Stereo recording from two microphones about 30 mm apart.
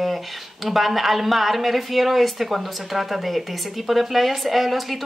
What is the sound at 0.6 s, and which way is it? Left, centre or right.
A woman's voice, centre.